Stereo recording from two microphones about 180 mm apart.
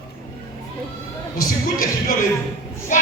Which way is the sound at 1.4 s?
50° left (ahead or behind).